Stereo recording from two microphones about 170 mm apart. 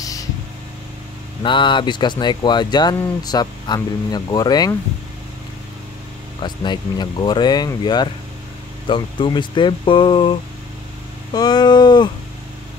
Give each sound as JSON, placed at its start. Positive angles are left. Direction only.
{"t": 0.0, "sound": "a sound", "side_deg": 20}
{"t": 1.4, "sound": "speech", "side_deg": 30}
{"t": 6.4, "sound": "speech", "side_deg": 25}
{"t": 11.3, "sound": "speech", "side_deg": 25}